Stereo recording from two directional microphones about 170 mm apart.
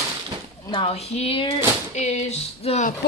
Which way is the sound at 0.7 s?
35° left (ahead or behind).